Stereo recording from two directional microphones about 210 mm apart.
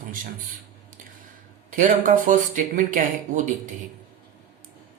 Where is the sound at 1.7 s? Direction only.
40° right (ahead or behind).